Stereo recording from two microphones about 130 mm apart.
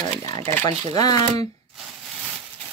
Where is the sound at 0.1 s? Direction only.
50° right (ahead or behind).